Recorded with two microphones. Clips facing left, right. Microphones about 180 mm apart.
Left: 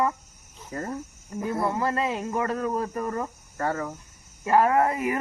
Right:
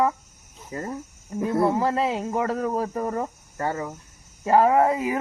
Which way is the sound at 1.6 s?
15° right (ahead or behind).